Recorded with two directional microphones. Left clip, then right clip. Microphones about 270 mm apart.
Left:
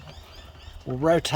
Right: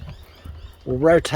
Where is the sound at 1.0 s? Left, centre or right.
Centre.